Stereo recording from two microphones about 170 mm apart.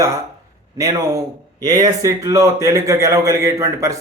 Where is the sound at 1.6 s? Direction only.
20° right (ahead or behind).